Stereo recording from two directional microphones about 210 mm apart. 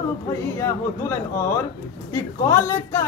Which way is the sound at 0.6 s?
15° left (ahead or behind).